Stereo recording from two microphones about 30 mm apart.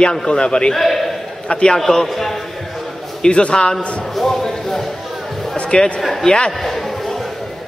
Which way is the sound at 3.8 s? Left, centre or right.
Left.